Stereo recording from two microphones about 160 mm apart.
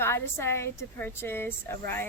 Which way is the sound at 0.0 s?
15° left (ahead or behind).